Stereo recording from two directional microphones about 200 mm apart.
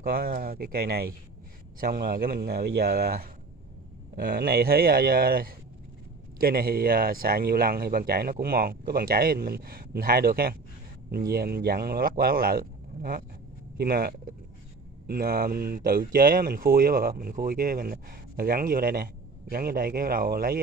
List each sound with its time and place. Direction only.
0.0 s speech: 50° right (ahead or behind)